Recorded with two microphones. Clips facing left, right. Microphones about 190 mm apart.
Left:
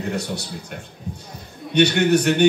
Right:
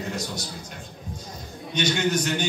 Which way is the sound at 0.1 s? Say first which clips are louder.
Left 5 dB; 60° left (ahead or behind).